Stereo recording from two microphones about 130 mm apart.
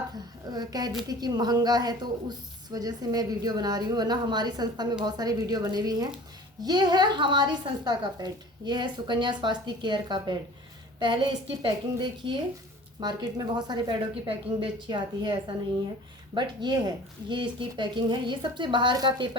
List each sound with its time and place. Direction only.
0.5 s a woman's voice: 30° right (ahead or behind)